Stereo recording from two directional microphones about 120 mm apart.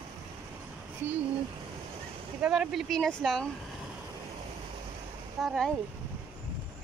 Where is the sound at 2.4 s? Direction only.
5° right (ahead or behind).